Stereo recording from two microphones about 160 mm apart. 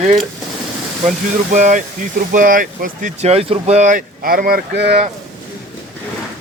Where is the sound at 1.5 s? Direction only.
50° right (ahead or behind); by 4.9 s 80° right.